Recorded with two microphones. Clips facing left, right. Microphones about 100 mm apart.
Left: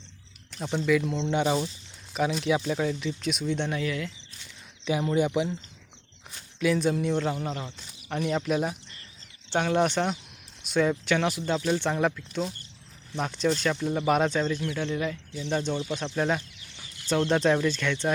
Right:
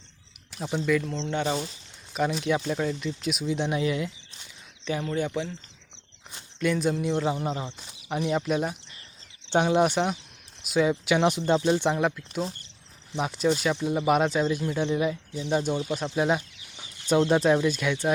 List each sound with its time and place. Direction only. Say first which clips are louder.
0.5 s speech: even; 5° right (ahead or behind)
0.9 s speech: left 2 dB; 5° left (ahead or behind)
2.1 s speech: even; centre (ahead or behind)
3.7 s speech: right 3 dB; 20° right (ahead or behind)
4.9 s speech: left 3 dB; 10° left (ahead or behind)
6.6 s speech: left 1 dB; centre (ahead or behind)
9.5 s speech: right 3 dB; 15° right (ahead or behind)
11.2 s speech: right 4 dB; 20° right (ahead or behind)
11.9 s speech: even; 5° right (ahead or behind)